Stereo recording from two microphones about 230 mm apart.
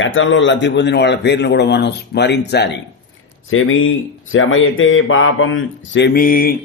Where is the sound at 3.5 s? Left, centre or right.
Left.